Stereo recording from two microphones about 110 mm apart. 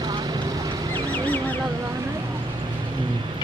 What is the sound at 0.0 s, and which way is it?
Boat, 40° right (ahead or behind).